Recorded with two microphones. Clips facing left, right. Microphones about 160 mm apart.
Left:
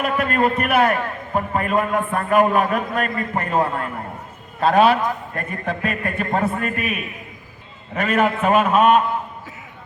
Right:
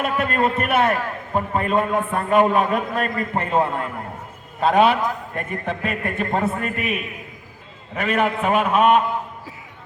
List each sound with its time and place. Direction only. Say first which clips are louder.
0.0 s a man's voice: left 1 dB; 25° right (ahead or behind)
8.1 s a man's voice: left 2 dB; 5° left (ahead or behind)
8.4 s a man's voice: left 1 dB; 10° right (ahead or behind)